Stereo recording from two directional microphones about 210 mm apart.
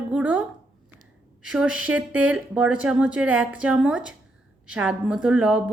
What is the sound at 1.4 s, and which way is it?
Speech, 5° right (ahead or behind).